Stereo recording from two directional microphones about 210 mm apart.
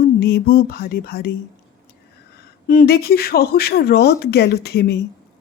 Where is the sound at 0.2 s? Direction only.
50° left (ahead or behind).